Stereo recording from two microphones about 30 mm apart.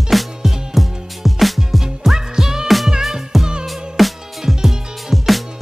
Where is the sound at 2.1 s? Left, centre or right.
Centre.